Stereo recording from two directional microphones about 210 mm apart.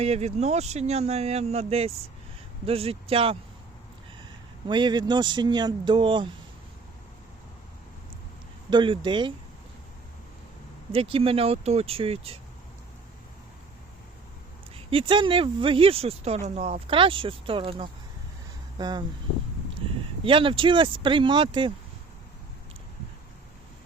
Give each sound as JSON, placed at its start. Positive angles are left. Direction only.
{"t": 0.0, "sound": "speech", "side_deg": -30}
{"t": 4.7, "sound": "speech", "side_deg": -20}
{"t": 8.7, "sound": "speech", "side_deg": -20}
{"t": 10.9, "sound": "speech", "side_deg": -25}
{"t": 14.8, "sound": "speech", "side_deg": -25}
{"t": 20.2, "sound": "speech", "side_deg": -25}